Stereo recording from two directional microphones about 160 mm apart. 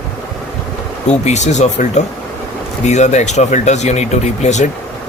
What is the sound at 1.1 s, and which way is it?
Speech, 45° left (ahead or behind).